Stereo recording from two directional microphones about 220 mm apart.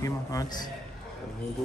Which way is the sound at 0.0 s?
15° left (ahead or behind).